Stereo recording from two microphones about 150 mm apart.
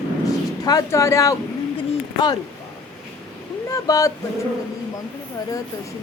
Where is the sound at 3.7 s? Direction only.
25° left (ahead or behind).